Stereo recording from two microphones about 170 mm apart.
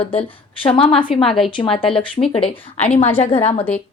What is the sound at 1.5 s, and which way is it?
A woman's voice, 30° left (ahead or behind).